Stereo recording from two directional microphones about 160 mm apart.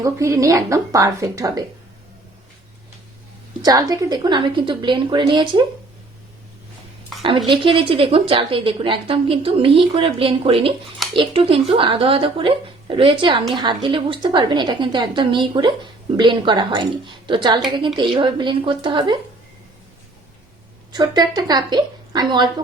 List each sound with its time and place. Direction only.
0.0 s a woman's voice: 20° right (ahead or behind)
3.6 s a woman's voice: 25° right (ahead or behind)
7.2 s speech: 30° right (ahead or behind)
20.9 s a woman's voice: 25° right (ahead or behind)